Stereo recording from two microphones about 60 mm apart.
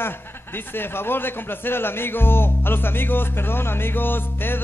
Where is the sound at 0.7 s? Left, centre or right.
Left.